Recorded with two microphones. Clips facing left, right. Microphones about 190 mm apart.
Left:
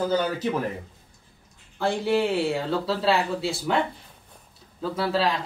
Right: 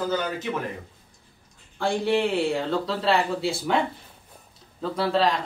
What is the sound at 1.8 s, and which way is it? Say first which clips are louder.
Speech: even; 5° left (ahead or behind).